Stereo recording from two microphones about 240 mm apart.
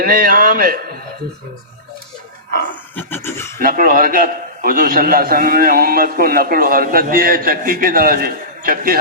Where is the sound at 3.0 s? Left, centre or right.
Centre.